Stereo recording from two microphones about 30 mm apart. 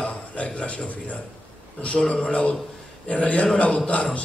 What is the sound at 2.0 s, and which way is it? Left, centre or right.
A man's voice, left.